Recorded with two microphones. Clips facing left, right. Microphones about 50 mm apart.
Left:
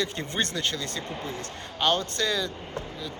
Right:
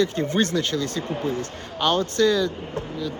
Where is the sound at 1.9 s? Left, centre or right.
Right.